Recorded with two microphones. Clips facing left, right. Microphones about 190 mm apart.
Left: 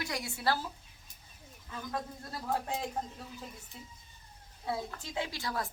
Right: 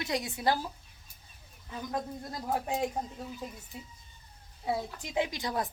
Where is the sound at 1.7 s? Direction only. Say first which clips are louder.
Right 3 dB; 20° right (ahead or behind).